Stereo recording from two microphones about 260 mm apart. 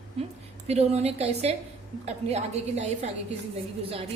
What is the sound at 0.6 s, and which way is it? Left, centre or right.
A woman's voice, right.